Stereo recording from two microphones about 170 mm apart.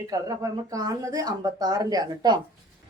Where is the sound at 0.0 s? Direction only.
20° right (ahead or behind).